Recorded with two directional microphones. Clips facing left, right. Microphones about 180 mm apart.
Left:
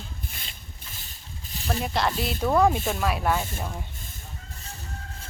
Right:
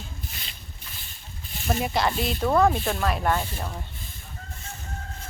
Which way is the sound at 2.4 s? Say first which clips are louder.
Even; 10° left (ahead or behind).